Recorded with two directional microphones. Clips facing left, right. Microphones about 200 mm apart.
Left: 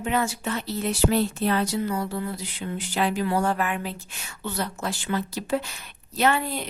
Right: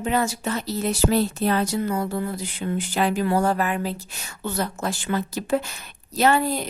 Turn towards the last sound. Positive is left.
turn(degrees=-40)  # may be behind; listen again after turning